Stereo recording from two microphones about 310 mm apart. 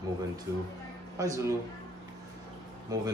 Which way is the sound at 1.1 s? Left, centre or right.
Centre.